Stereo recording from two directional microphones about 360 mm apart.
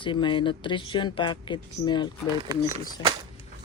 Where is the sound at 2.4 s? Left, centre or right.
Centre.